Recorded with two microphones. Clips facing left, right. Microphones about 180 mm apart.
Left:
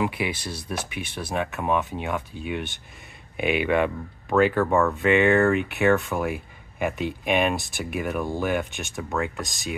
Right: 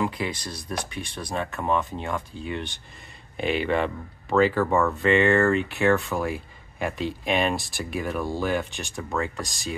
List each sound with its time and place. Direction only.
0.0 s speech: 10° left (ahead or behind)
3.3 s speech: 10° left (ahead or behind)
8.2 s speech: 15° left (ahead or behind)
8.7 s speech: centre (ahead or behind)